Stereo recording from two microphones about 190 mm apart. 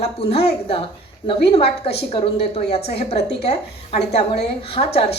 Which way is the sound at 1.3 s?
30° left (ahead or behind).